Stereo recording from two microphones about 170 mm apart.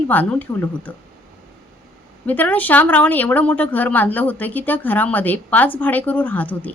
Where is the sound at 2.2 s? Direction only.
10° left (ahead or behind).